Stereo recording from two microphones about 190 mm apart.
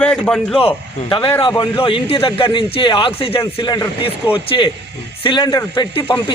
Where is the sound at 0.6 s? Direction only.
25° left (ahead or behind).